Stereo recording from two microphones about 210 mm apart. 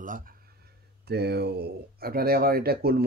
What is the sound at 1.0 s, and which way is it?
Speech, 50° right (ahead or behind).